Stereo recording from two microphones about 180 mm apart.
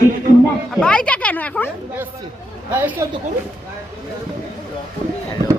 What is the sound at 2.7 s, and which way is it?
Speech, 10° right (ahead or behind).